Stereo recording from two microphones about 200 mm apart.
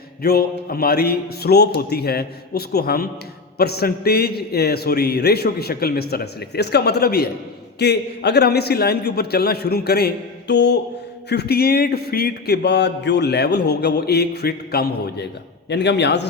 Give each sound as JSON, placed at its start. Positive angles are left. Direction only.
{"t": 0.2, "sound": "a man's voice", "side_deg": 50}